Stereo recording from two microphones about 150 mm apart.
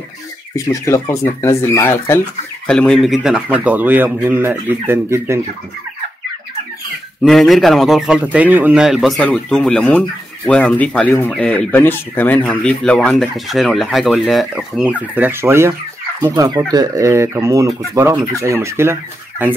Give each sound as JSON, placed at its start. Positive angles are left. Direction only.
{"t": 0.6, "sound": "speech", "side_deg": 20}
{"t": 7.2, "sound": "speech", "side_deg": 0}